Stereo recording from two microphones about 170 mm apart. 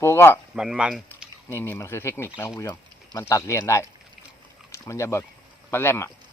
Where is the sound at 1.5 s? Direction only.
15° left (ahead or behind).